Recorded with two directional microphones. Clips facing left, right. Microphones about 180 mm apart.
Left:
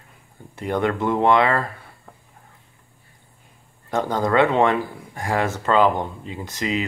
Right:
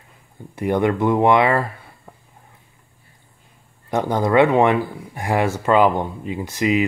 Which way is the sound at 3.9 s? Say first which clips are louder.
Right 3 dB; 15° right (ahead or behind).